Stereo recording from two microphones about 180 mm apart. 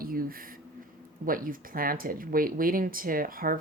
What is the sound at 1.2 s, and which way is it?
Speech, 50° right (ahead or behind).